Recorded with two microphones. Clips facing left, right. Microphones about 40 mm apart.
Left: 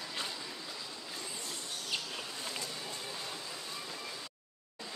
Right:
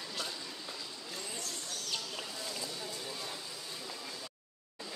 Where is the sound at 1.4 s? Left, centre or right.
Left.